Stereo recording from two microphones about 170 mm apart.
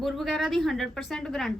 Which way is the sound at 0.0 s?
Centre (ahead or behind).